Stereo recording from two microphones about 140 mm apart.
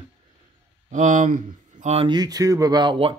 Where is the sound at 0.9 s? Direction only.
65° right (ahead or behind).